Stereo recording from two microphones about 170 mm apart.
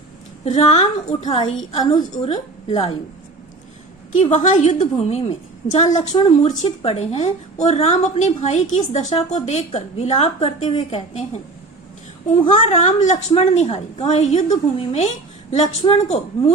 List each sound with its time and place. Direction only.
0.4 s a woman's voice: 40° left (ahead or behind)
4.2 s a woman's voice: 45° left (ahead or behind)
12.5 s a woman's voice: 40° left (ahead or behind)